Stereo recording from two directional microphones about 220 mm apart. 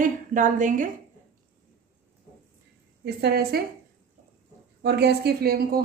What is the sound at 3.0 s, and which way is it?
Speech, 45° right (ahead or behind).